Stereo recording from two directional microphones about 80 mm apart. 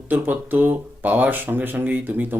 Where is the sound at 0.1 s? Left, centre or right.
Right.